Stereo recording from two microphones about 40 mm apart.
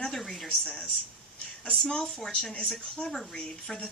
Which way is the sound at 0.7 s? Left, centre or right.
Left.